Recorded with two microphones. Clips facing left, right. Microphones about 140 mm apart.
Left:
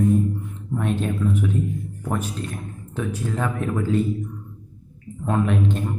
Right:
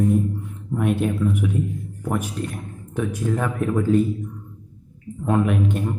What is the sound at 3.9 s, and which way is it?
Speech, 45° right (ahead or behind).